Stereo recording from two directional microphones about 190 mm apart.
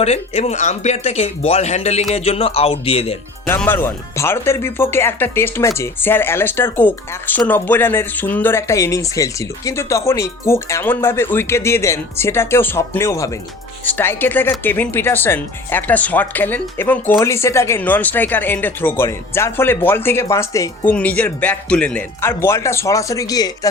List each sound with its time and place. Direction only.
0.0 s speech: 35° left (ahead or behind)
3.4 s speech: 10° left (ahead or behind)